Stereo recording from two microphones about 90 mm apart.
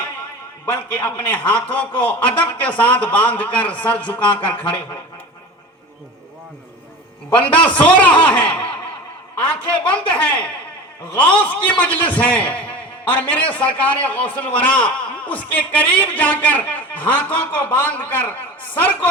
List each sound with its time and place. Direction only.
0.6 s a man's voice: 15° left (ahead or behind)
7.3 s a man's voice: 15° left (ahead or behind)